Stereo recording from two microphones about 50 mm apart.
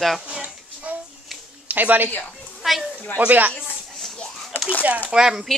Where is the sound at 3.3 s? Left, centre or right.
Right.